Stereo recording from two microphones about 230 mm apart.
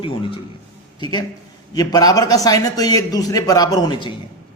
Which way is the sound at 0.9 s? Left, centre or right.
Centre.